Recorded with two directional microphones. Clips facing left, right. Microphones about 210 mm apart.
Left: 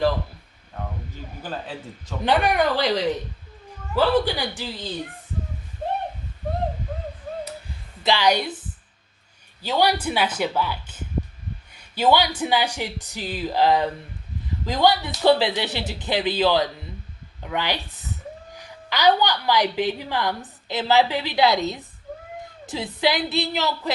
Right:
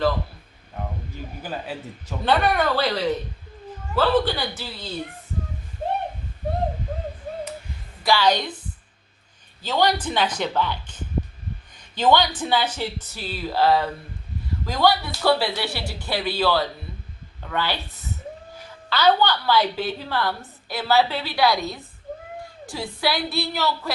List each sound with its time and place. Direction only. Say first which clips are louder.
1.4 s a man's voice: even; 10° right (ahead or behind)
2.2 s a woman's voice: left 1 dB; 15° left (ahead or behind)
3.9 s a woman's voice: even; 15° left (ahead or behind)
8.0 s a woman's voice: even; 15° left (ahead or behind)
9.6 s a woman's voice: even; 10° left (ahead or behind)